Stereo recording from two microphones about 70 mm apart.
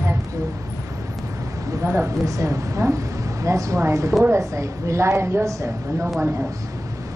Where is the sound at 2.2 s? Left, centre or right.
Right.